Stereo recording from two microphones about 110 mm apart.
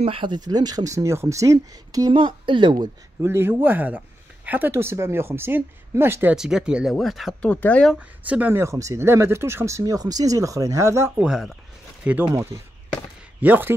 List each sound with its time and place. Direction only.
0.0 s speech: 50° right (ahead or behind); by 2.1 s 35° right (ahead or behind)
2.1 s speech: 50° right (ahead or behind)
3.2 s speech: 20° right (ahead or behind)
6.3 s speech: 5° right (ahead or behind)
7.4 s speech: 15° left (ahead or behind)
8.3 s speech: 15° right (ahead or behind)
11.1 s speech: 5° right (ahead or behind)
12.5 s speech: 30° right (ahead or behind)
13.4 s speech: 15° right (ahead or behind)